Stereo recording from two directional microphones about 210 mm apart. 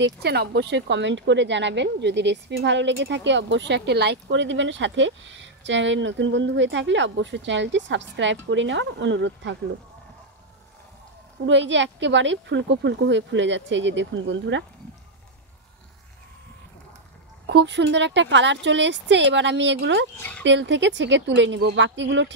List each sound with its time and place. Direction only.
0.0 s speech: 50° right (ahead or behind)
11.4 s speech: 60° right (ahead or behind)
17.5 s speech: 55° right (ahead or behind)
20.2 s speech: 10° left (ahead or behind)
20.4 s speech: 60° right (ahead or behind)